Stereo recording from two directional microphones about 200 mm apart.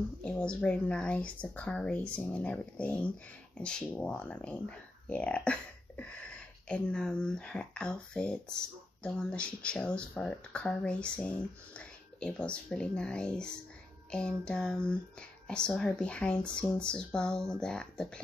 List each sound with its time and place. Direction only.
0.2 s speech: 5° left (ahead or behind)